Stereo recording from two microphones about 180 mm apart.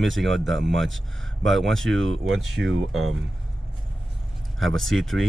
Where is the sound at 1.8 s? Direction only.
90° right.